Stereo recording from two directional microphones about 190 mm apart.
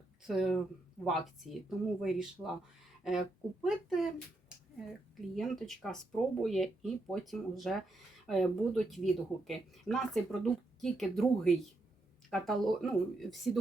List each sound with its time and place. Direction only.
0.3 s speech: centre (ahead or behind)